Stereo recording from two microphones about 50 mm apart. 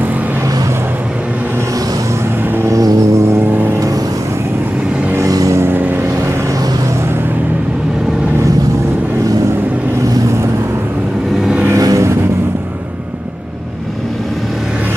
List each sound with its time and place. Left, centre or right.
2.6 s vehicle: right
5.2 s vehicle: right
5.7 s vehicle: right
11.7 s vehicle: right